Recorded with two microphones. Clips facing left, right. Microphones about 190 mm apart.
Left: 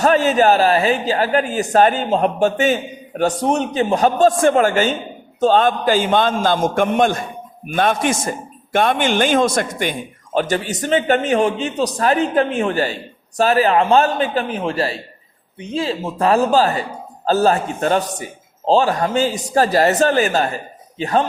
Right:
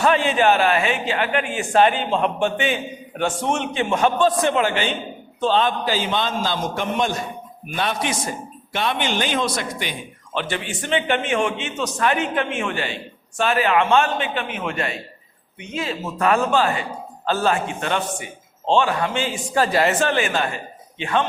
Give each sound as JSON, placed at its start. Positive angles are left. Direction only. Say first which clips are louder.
{"t": 0.0, "sound": "a man's voice", "louder": "left 4 dB", "side_deg": 40}